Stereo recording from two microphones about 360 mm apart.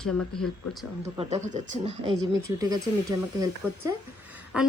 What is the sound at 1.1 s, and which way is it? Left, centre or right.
A woman's voice, centre.